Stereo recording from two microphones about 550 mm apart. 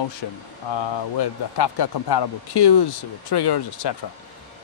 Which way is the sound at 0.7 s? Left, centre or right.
Left.